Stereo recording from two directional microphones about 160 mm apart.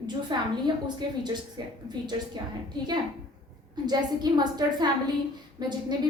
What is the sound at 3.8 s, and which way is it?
A woman's voice, 25° right (ahead or behind).